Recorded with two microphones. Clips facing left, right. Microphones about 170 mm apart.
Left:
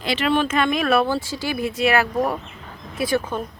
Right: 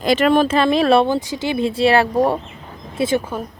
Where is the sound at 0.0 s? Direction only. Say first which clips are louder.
Right 6 dB; 45° right (ahead or behind); by 3.2 s 25° right (ahead or behind).